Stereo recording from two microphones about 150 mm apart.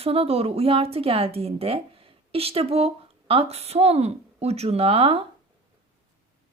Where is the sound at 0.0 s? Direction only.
40° right (ahead or behind).